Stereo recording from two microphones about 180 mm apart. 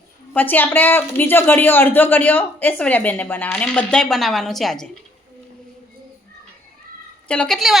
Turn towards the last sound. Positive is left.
turn(degrees=0)  # may be behind; listen again after turning